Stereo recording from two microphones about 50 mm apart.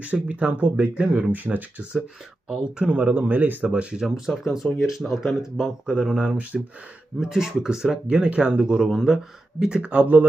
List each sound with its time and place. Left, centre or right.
0.0 s speech: right; by 2.9 s centre
2.9 s speech: right
3.7 s speech: right
4.0 s speech: centre; by 6.6 s right
7.2 s speech: centre
8.1 s speech: right